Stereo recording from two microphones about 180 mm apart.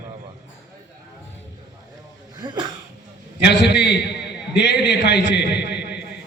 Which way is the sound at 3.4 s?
70° left (ahead or behind).